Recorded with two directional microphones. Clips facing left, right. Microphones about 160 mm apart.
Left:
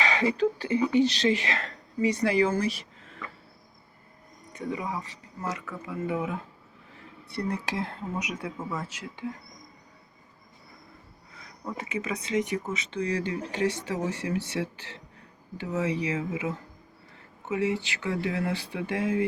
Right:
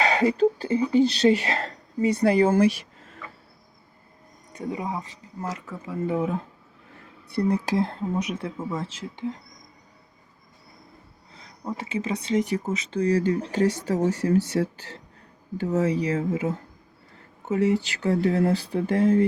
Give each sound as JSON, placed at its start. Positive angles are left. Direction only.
{"t": 0.0, "sound": "a woman's voice", "side_deg": -40}
{"t": 4.5, "sound": "speech", "side_deg": -35}
{"t": 7.4, "sound": "speech", "side_deg": -35}
{"t": 11.3, "sound": "speech", "side_deg": -30}